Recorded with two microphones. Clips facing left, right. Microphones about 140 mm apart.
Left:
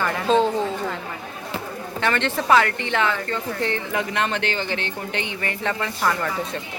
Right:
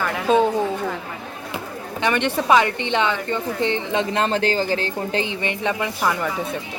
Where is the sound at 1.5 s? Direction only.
15° right (ahead or behind).